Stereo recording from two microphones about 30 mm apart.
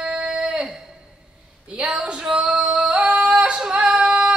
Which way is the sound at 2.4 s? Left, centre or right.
Right.